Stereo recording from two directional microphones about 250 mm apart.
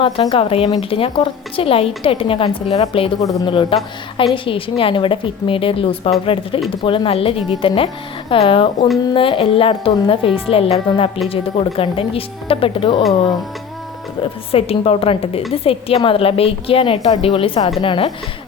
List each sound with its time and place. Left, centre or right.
0.0 s a woman's voice: left
14.2 s a woman's voice: left